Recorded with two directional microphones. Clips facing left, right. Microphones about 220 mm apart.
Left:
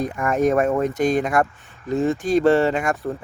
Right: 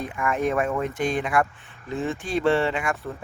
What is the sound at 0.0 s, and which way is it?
Speech, 40° left (ahead or behind).